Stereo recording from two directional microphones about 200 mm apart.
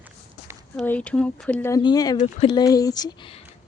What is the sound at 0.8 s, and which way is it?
Speech, 5° left (ahead or behind).